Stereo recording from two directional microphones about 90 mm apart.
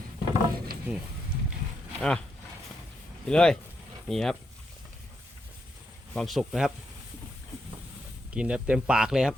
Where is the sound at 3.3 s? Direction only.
10° left (ahead or behind).